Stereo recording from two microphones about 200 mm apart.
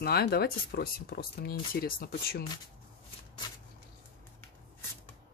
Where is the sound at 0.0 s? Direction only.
50° left (ahead or behind).